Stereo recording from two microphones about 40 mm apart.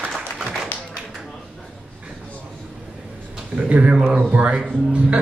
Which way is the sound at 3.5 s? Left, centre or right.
Right.